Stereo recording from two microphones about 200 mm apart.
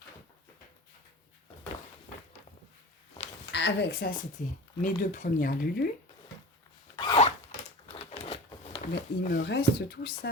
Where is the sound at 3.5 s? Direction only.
60° left (ahead or behind).